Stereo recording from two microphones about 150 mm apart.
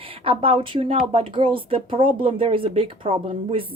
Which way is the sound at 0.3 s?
35° right (ahead or behind).